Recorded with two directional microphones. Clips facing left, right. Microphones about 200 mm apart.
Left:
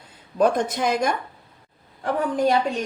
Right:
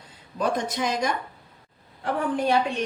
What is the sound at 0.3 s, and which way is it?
Speech, 55° left (ahead or behind).